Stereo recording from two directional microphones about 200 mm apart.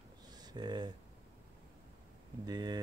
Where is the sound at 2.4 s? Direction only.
20° right (ahead or behind).